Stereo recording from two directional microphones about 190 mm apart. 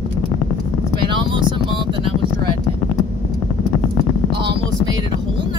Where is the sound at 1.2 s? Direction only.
25° right (ahead or behind).